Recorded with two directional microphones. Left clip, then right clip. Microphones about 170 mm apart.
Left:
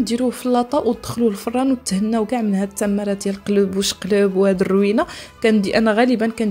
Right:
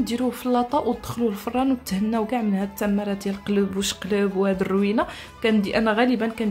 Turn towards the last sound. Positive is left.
turn(degrees=35)  # may be behind; listen again after turning